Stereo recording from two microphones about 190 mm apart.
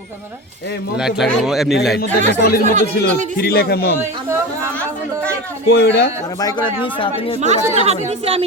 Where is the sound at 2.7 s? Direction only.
40° right (ahead or behind).